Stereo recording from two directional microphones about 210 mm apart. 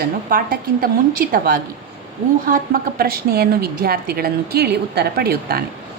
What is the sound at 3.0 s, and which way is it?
A woman's voice, 45° right (ahead or behind).